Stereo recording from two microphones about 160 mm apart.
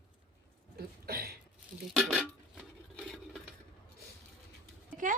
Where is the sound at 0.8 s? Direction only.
70° right (ahead or behind).